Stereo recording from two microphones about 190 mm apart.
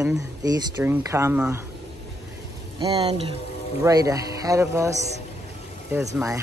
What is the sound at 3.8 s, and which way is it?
Speech, 15° right (ahead or behind).